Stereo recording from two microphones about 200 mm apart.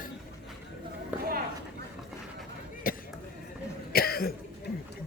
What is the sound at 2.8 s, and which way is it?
Chop, 45° left (ahead or behind).